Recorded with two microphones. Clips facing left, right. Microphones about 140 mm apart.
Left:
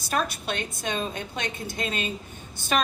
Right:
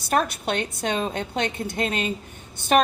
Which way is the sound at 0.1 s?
60° right (ahead or behind).